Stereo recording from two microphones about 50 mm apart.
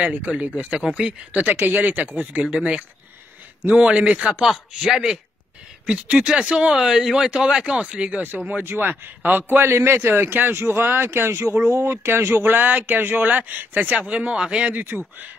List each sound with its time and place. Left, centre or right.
0.0 s speech: right
0.7 s speech: centre
1.4 s speech: right
4.5 s speech: centre
6.7 s speech: centre
8.7 s speech: right
9.5 s speech: right
11.3 s speech: right
11.8 s speech: right
14.9 s speech: right